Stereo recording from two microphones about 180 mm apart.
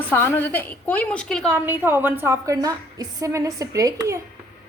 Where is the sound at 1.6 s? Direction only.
10° right (ahead or behind).